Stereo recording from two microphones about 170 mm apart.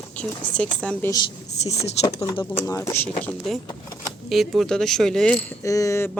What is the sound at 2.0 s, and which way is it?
Speech, 20° left (ahead or behind).